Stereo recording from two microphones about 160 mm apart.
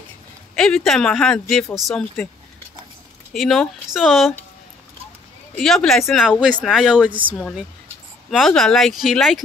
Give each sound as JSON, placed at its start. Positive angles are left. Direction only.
{"t": 0.6, "sound": "speech", "side_deg": 5}
{"t": 3.3, "sound": "speech", "side_deg": 0}
{"t": 5.5, "sound": "speech", "side_deg": 5}
{"t": 7.1, "sound": "speech", "side_deg": -30}
{"t": 8.3, "sound": "speech", "side_deg": 0}